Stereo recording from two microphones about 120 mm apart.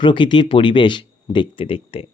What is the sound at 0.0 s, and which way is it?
Speech, 45° left (ahead or behind).